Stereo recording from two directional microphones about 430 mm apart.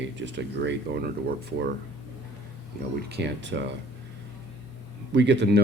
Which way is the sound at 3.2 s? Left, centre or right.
Right.